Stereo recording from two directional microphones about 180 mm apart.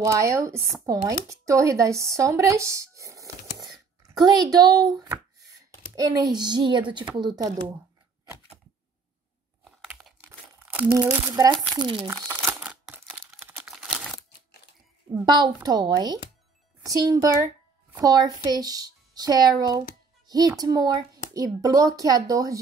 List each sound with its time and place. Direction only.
0.0 s a child's voice: 15° right (ahead or behind)
9.7 s crumpling: centre (ahead or behind)
10.9 s a child's voice: 15° right (ahead or behind)
12.3 s a sound: 15° right (ahead or behind)
13.4 s crumpling: 10° right (ahead or behind)
15.2 s a child's voice: 25° right (ahead or behind)